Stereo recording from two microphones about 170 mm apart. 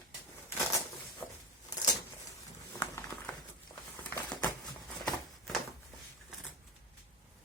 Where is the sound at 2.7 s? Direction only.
20° left (ahead or behind).